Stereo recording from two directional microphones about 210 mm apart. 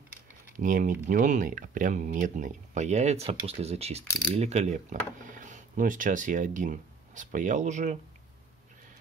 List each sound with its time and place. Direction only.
0.6 s speech: 40° right (ahead or behind)